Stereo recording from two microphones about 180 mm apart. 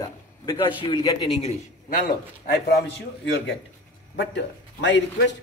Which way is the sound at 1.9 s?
55° left (ahead or behind).